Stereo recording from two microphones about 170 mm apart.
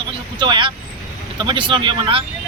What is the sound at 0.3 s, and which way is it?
Speech, 25° right (ahead or behind).